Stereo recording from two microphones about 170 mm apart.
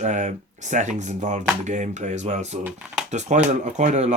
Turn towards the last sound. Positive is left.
turn(degrees=-45)  # may be behind; listen again after turning